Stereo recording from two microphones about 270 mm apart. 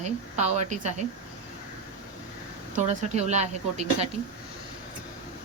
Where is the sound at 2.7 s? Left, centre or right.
Right.